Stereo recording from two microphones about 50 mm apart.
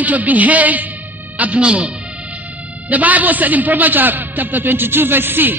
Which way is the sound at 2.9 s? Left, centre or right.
Right.